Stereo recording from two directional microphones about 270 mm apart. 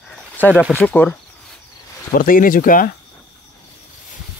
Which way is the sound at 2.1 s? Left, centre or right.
Left.